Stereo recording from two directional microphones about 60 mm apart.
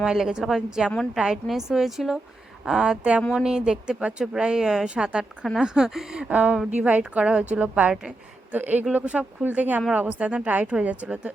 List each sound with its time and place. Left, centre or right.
0.0 s speech: centre